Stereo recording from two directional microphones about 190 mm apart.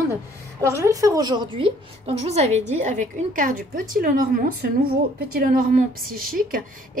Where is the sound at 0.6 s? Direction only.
15° right (ahead or behind).